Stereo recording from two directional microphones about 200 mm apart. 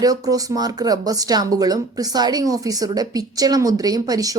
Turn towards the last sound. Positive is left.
turn(degrees=-15)  # may be behind; listen again after turning